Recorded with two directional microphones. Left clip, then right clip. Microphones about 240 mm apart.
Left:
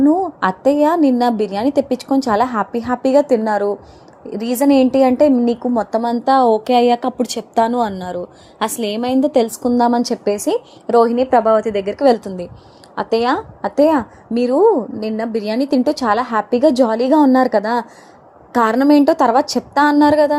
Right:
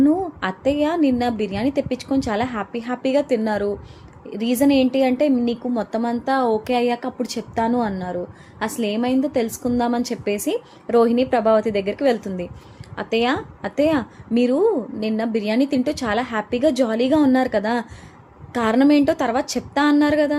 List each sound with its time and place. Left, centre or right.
0.1 s a woman's voice: centre